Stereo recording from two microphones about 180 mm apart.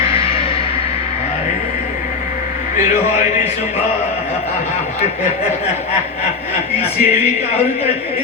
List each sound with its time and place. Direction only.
7.0 s speech: 35° left (ahead or behind)